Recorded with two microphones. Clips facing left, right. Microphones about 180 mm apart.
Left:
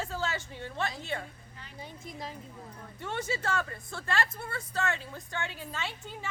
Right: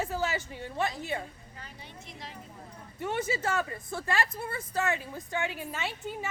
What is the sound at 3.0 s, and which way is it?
A woman's voice, 20° right (ahead or behind).